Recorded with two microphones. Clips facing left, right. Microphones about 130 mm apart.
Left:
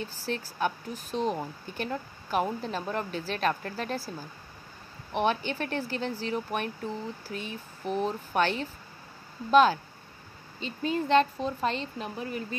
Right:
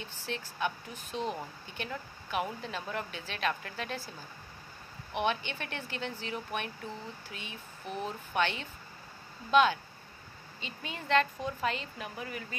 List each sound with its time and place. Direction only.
0.0 s speech: 40° left (ahead or behind)
5.1 s speech: 35° left (ahead or behind)